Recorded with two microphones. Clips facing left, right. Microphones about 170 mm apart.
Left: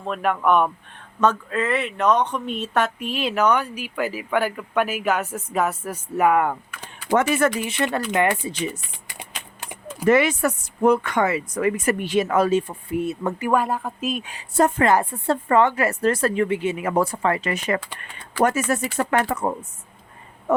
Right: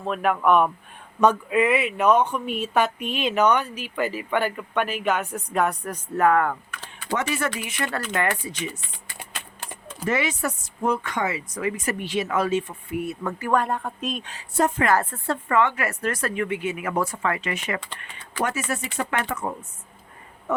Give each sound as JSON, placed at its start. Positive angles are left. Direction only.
{"t": 0.0, "sound": "speech", "side_deg": 0}
{"t": 1.2, "sound": "speech", "side_deg": -15}
{"t": 7.1, "sound": "speech", "side_deg": 50}
{"t": 7.6, "sound": "speech", "side_deg": 25}
{"t": 7.9, "sound": "speech", "side_deg": 15}
{"t": 9.0, "sound": "a sound", "side_deg": 15}
{"t": 10.1, "sound": "speech", "side_deg": 60}
{"t": 13.0, "sound": "speech", "side_deg": 25}
{"t": 13.5, "sound": "speech", "side_deg": 5}
{"t": 14.5, "sound": "speech", "side_deg": 40}
{"t": 14.8, "sound": "speech", "side_deg": 15}
{"t": 15.3, "sound": "speech", "side_deg": 35}
{"t": 17.7, "sound": "speech", "side_deg": 10}
{"t": 18.4, "sound": "speech", "side_deg": 45}